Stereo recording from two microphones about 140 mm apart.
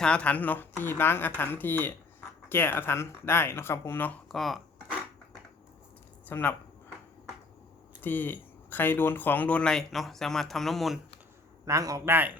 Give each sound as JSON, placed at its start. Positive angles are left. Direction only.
{"t": 0.0, "sound": "speech", "side_deg": 10}
{"t": 6.2, "sound": "speech", "side_deg": 15}
{"t": 8.0, "sound": "speech", "side_deg": 15}
{"t": 11.6, "sound": "a man's voice", "side_deg": -25}